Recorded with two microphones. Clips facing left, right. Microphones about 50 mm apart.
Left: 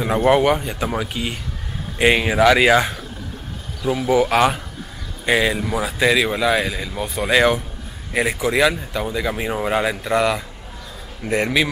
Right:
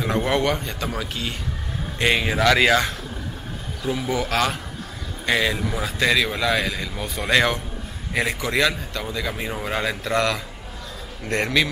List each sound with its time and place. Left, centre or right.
0.0 s speech: centre
3.8 s speech: centre
4.1 s speech: centre